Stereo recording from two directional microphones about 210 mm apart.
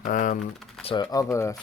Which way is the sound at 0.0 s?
40° left (ahead or behind).